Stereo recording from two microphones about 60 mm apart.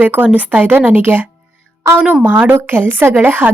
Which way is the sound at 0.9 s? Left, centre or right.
Right.